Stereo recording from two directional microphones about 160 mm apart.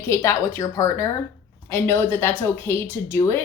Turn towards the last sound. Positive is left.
turn(degrees=15)  # may be behind; listen again after turning